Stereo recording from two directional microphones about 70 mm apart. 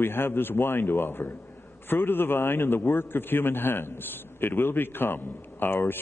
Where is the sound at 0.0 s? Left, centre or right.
Left.